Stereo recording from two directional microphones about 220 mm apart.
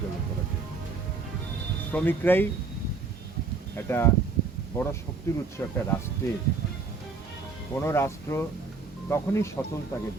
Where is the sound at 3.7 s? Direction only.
10° left (ahead or behind).